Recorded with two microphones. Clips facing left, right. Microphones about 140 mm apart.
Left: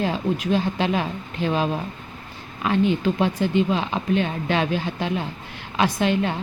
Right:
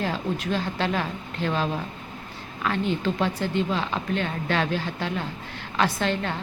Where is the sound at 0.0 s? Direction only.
15° left (ahead or behind).